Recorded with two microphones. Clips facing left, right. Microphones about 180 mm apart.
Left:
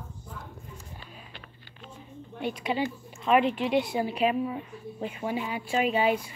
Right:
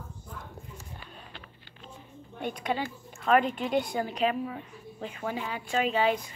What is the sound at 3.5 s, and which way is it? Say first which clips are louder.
A woman's voice: left 2 dB; 5° left (ahead or behind).